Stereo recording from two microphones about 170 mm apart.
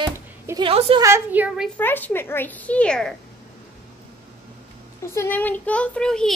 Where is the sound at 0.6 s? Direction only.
35° right (ahead or behind).